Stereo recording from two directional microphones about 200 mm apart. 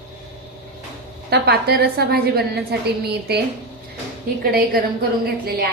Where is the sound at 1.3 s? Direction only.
50° right (ahead or behind).